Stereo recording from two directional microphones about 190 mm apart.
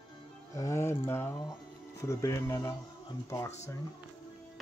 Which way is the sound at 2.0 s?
15° left (ahead or behind).